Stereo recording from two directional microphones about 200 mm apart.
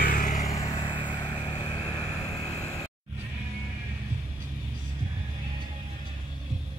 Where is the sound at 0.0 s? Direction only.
40° left (ahead or behind).